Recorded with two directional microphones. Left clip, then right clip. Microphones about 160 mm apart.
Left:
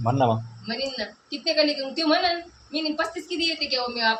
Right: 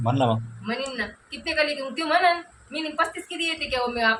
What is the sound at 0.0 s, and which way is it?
Speech, 5° right (ahead or behind).